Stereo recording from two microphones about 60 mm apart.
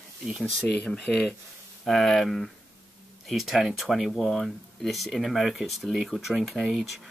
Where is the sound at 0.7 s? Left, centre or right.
Centre.